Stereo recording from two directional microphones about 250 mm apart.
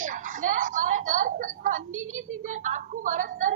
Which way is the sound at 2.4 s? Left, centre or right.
Right.